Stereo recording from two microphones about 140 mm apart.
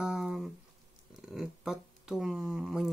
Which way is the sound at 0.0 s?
5° right (ahead or behind).